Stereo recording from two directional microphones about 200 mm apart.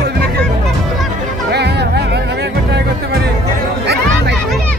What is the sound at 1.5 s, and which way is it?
Music, 55° right (ahead or behind).